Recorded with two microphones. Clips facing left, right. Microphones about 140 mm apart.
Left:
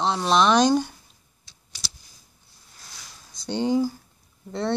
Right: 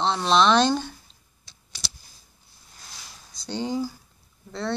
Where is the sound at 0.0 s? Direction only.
10° left (ahead or behind).